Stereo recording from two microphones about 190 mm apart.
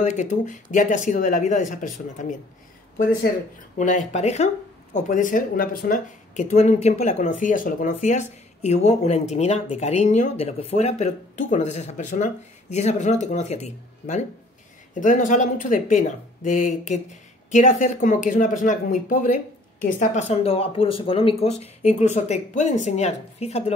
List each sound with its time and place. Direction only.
0.0 s speech: 40° left (ahead or behind)
3.7 s speech: 40° left (ahead or behind)